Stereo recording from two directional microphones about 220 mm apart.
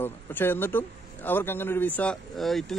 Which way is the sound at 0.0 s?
10° left (ahead or behind).